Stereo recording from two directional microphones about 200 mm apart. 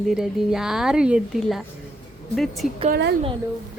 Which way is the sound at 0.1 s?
Centre (ahead or behind).